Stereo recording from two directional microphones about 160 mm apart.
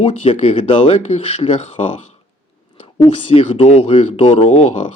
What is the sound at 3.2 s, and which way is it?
Speech, 35° left (ahead or behind).